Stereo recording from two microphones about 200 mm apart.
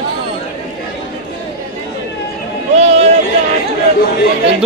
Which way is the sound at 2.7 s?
30° right (ahead or behind).